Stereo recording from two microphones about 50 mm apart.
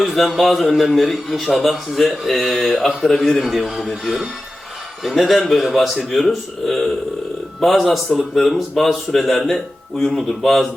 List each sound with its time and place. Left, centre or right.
0.0 s speech: centre